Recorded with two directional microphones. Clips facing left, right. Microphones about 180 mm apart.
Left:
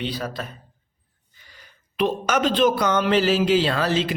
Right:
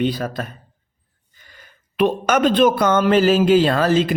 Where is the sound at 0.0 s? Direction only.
50° right (ahead or behind).